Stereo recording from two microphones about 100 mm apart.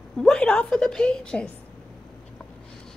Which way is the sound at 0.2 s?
10° left (ahead or behind).